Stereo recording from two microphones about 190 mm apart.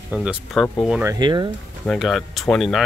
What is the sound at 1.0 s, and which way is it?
Speech, 20° right (ahead or behind).